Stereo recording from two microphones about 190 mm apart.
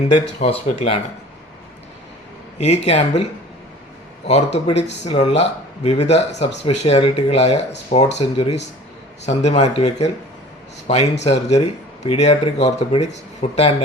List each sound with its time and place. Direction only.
0.4 s speech: 35° left (ahead or behind)
2.6 s speech: 35° left (ahead or behind)
4.3 s a man's voice: 35° left (ahead or behind)